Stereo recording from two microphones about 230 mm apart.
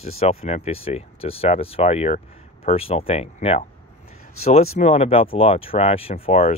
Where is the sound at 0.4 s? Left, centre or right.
Left.